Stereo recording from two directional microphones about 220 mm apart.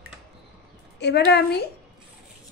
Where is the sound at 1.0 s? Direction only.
50° left (ahead or behind).